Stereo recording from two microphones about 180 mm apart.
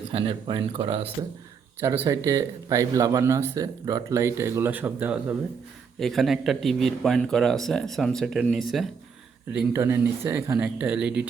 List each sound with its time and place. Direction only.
0.1 s speech: 30° right (ahead or behind)
1.8 s speech: 15° right (ahead or behind)